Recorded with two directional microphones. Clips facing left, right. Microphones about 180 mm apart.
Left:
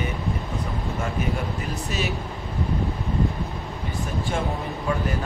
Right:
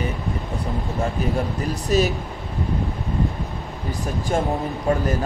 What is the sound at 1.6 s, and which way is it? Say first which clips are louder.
Speech: right 8 dB; 40° right (ahead or behind).